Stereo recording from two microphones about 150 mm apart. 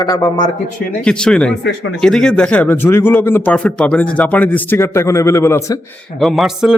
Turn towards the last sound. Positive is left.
turn(degrees=0)  # may be behind; listen again after turning